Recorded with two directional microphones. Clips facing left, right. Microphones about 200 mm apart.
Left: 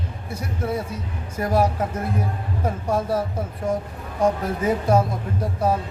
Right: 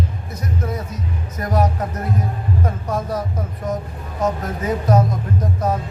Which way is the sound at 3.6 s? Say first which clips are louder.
Left 1 dB; 25° left (ahead or behind).